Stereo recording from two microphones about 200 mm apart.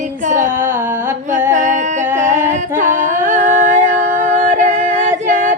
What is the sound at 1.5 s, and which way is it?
Music, 40° right (ahead or behind).